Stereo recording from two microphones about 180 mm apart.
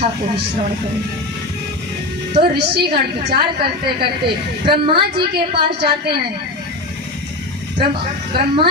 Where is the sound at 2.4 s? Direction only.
65° right (ahead or behind).